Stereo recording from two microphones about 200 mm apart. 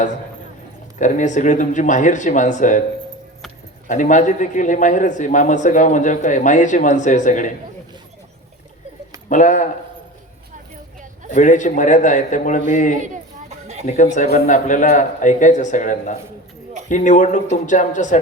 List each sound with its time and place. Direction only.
0.9 s a man's voice: 40° left (ahead or behind)
3.8 s a man's voice: 40° left (ahead or behind)
9.3 s a man's voice: 40° left (ahead or behind)
11.3 s a man's voice: 40° left (ahead or behind)
13.5 s a sound: 35° right (ahead or behind)
13.8 s a man's voice: 35° left (ahead or behind)